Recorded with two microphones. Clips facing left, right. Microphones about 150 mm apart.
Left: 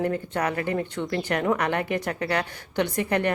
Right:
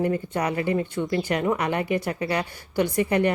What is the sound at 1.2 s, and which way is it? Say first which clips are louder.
Speech: left 1 dB; 10° right (ahead or behind).